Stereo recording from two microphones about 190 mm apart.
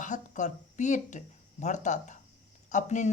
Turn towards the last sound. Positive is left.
turn(degrees=40)  # may be behind; listen again after turning